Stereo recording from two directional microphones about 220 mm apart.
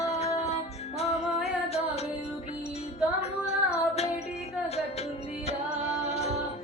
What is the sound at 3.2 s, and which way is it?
Female singing, 30° left (ahead or behind).